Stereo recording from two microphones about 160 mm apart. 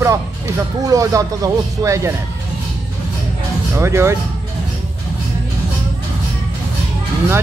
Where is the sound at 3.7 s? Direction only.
15° right (ahead or behind).